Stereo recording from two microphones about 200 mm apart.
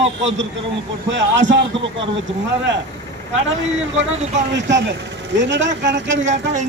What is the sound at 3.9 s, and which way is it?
Speech, 70° right (ahead or behind).